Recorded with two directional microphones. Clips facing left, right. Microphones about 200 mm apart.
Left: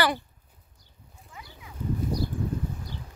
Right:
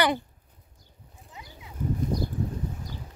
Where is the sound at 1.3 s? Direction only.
20° right (ahead or behind).